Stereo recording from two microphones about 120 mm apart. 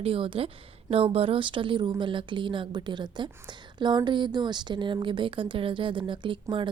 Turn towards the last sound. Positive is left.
turn(degrees=-45)  # may be behind; listen again after turning